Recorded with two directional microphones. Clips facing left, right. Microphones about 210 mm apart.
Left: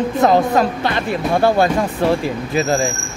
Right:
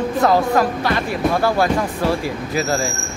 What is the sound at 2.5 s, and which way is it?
Speech, 20° left (ahead or behind).